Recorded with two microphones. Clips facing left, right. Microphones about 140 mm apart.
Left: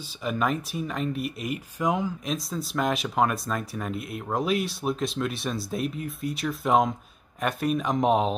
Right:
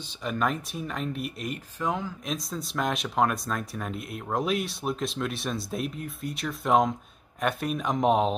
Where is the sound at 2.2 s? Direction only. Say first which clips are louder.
Left 2 dB; centre (ahead or behind).